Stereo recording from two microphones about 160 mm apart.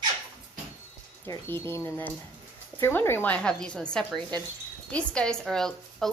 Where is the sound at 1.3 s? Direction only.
15° left (ahead or behind).